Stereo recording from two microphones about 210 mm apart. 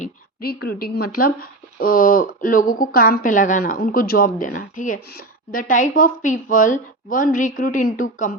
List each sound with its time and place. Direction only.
0.0 s speech: 45° left (ahead or behind)